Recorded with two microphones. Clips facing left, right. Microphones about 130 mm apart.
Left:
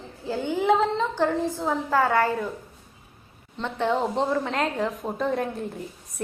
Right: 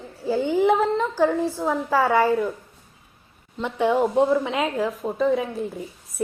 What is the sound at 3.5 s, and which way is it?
Speech, 10° right (ahead or behind).